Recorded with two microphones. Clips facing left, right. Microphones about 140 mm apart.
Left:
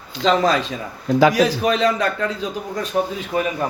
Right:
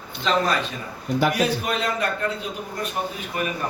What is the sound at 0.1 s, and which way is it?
A man's voice, 90° left.